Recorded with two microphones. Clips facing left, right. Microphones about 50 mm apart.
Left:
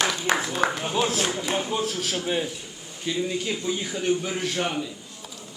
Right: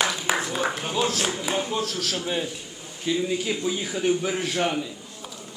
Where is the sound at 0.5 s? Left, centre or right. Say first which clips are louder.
Left 1 dB; centre.